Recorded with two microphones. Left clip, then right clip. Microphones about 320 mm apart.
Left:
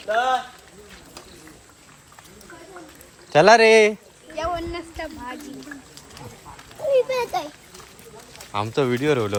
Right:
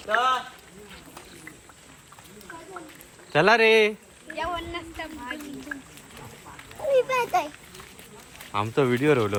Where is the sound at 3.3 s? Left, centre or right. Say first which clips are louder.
Left 6 dB; centre.